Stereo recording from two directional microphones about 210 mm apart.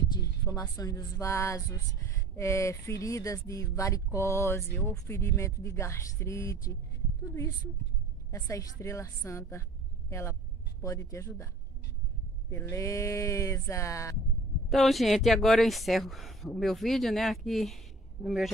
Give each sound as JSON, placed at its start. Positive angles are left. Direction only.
{"t": 0.1, "sound": "a woman's voice", "side_deg": 15}
{"t": 12.4, "sound": "speech", "side_deg": 15}
{"t": 14.7, "sound": "speech", "side_deg": 0}